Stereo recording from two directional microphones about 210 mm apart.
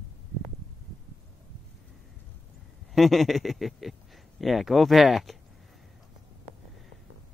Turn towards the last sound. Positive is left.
turn(degrees=0)  # may be behind; listen again after turning